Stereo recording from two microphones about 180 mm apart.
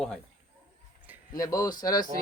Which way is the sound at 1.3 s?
20° left (ahead or behind).